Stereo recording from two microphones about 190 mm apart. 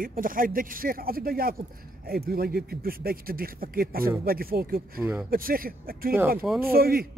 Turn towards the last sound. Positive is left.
turn(degrees=-50)  # may be behind; listen again after turning